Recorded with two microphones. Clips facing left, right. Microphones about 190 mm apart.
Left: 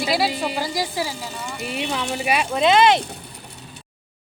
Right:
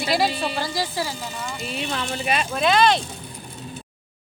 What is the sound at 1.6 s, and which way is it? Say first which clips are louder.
Speech: left 3 dB; 70° left (ahead or behind).